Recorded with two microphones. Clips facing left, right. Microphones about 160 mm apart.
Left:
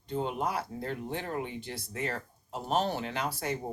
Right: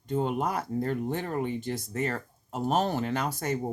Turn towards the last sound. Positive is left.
turn(degrees=-45)  # may be behind; listen again after turning